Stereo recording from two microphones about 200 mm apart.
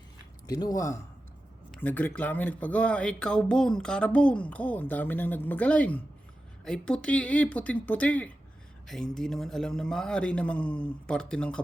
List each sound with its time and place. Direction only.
0.4 s a man's voice: 20° left (ahead or behind)